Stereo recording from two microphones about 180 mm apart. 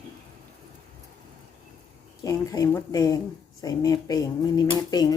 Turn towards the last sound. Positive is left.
turn(degrees=20)  # may be behind; listen again after turning